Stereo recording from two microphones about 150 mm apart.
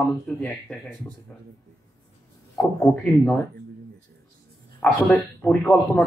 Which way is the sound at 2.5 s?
5° left (ahead or behind).